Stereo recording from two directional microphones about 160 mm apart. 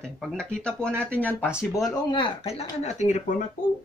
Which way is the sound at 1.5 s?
5° right (ahead or behind).